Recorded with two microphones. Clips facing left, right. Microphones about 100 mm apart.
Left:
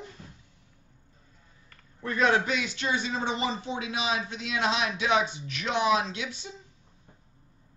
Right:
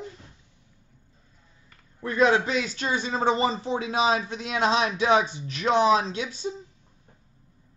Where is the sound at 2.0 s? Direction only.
20° right (ahead or behind).